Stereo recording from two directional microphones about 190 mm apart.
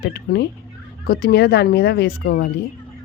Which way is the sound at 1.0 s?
55° left (ahead or behind).